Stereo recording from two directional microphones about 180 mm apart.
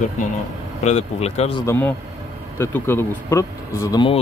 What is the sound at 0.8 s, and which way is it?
Speech, 35° left (ahead or behind).